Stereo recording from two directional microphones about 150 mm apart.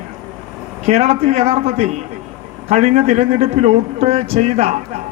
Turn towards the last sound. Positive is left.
turn(degrees=-45)  # may be behind; listen again after turning